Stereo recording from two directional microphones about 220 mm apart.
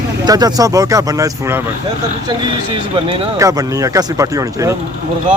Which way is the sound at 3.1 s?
15° right (ahead or behind).